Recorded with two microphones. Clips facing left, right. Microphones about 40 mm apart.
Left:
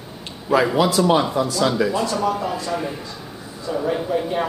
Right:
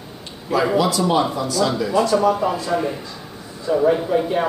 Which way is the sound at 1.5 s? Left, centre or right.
Centre.